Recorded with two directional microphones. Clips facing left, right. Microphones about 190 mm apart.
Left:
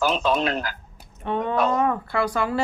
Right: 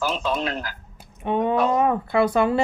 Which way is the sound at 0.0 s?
70° left (ahead or behind).